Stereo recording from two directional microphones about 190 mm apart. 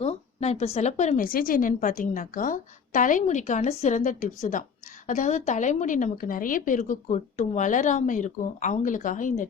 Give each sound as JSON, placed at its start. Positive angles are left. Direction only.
{"t": 0.0, "sound": "a woman's voice", "side_deg": 35}